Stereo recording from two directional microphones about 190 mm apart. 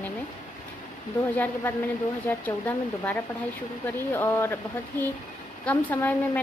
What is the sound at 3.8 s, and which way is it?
A woman's voice, 10° left (ahead or behind).